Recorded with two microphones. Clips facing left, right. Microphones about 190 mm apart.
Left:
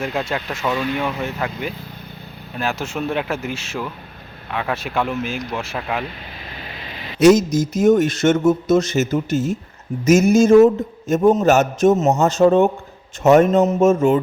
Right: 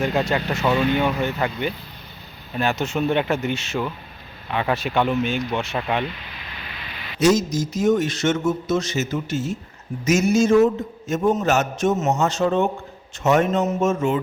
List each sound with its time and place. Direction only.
0.0 s speech: centre (ahead or behind)
6.6 s a sound: 35° left (ahead or behind)
7.2 s speech: 55° left (ahead or behind)